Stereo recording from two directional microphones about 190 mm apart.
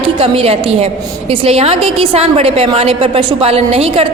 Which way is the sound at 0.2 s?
30° right (ahead or behind).